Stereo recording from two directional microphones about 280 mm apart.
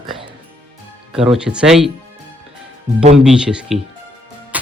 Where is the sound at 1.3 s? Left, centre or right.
Centre.